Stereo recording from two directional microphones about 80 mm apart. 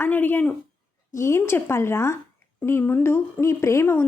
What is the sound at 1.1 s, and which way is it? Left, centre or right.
A woman's voice, left.